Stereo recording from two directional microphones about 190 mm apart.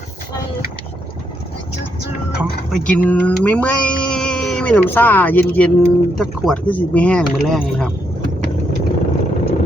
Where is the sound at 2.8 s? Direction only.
10° left (ahead or behind).